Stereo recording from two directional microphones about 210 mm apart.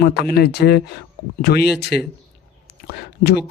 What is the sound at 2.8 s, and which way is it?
Speech, 50° left (ahead or behind).